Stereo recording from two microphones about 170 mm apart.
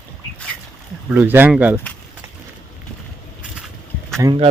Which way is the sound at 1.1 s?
10° right (ahead or behind).